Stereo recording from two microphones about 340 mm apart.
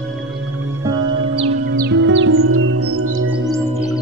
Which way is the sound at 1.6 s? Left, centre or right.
Right.